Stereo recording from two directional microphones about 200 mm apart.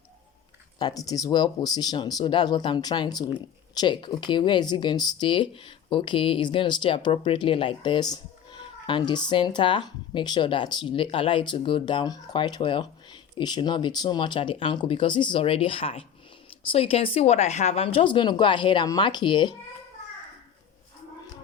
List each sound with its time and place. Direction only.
0.8 s speech: 20° left (ahead or behind)